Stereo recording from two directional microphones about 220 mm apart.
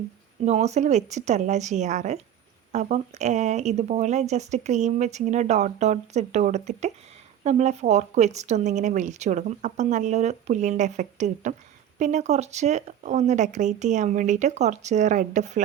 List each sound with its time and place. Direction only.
0.4 s speech: 30° right (ahead or behind)